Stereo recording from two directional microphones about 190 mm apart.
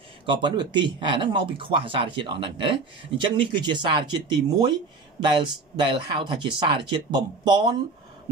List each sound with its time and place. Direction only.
0.2 s speech: 25° right (ahead or behind)